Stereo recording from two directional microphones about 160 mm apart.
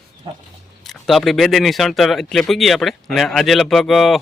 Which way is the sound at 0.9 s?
Centre (ahead or behind).